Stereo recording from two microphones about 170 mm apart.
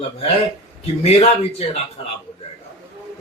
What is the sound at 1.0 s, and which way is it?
Speech, 35° left (ahead or behind).